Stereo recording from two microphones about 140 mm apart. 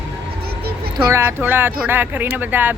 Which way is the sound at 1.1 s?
15° right (ahead or behind).